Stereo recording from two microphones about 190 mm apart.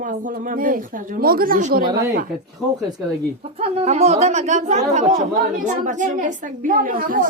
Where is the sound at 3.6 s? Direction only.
35° right (ahead or behind).